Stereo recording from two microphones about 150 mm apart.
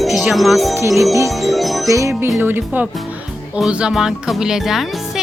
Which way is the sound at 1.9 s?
20° right (ahead or behind).